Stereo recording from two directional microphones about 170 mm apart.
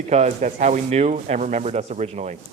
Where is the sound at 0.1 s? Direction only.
45° right (ahead or behind).